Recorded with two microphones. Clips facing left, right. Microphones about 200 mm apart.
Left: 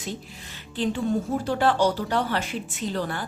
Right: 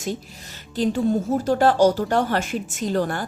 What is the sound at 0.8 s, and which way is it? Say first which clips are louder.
Speech: right 4 dB; 40° right (ahead or behind).